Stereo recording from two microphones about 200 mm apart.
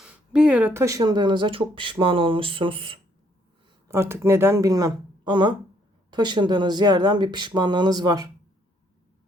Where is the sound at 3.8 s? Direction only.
15° right (ahead or behind).